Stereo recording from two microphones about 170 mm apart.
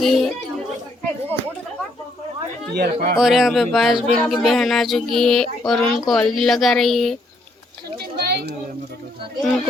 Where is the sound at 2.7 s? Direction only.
70° right (ahead or behind).